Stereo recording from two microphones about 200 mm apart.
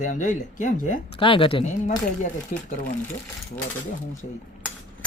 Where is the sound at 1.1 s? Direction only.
25° left (ahead or behind).